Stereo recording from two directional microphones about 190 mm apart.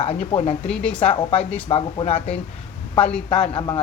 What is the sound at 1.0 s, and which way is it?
Speech, 30° left (ahead or behind).